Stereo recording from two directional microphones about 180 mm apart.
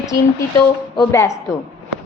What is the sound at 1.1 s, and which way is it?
Speech, 15° left (ahead or behind).